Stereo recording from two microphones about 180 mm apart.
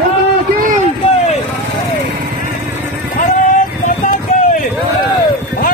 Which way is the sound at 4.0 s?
50° left (ahead or behind).